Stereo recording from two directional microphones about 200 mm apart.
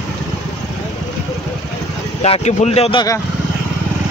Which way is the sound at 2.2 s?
30° left (ahead or behind).